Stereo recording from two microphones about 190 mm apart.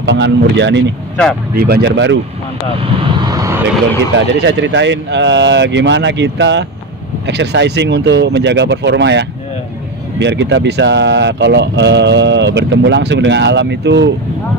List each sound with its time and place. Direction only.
0.0 s speech: 70° right (ahead or behind)
1.5 s speech: 55° right (ahead or behind)
2.8 s vehicle: 25° right (ahead or behind)
4.4 s speech: 70° right (ahead or behind)